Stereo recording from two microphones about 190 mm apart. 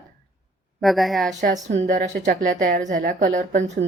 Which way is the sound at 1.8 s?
40° right (ahead or behind).